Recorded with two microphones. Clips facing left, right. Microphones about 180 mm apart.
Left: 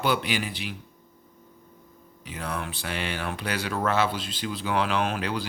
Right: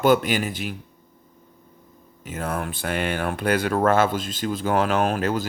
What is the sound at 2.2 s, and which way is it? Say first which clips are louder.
Speech: right 5 dB; 50° right (ahead or behind).